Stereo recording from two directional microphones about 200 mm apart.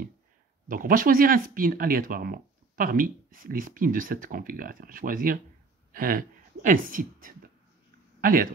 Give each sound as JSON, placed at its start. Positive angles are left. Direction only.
{"t": 0.7, "sound": "speech", "side_deg": -45}